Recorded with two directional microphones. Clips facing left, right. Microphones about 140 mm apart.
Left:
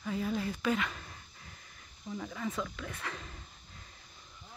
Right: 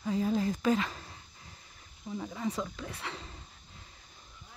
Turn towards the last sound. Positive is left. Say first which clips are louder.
# even
turn(degrees=-25)  # may be behind; listen again after turning